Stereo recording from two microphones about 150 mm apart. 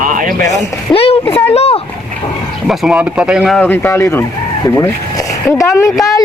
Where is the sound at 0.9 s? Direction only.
40° left (ahead or behind).